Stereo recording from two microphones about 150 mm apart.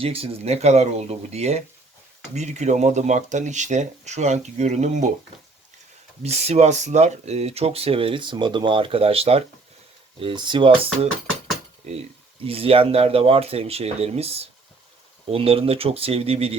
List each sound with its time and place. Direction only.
0.0 s speech: 40° right (ahead or behind)
6.2 s speech: 45° right (ahead or behind)
12.5 s speech: 40° right (ahead or behind)